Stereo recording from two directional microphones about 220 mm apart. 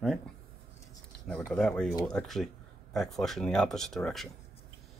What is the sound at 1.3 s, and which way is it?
Speech, 5° left (ahead or behind).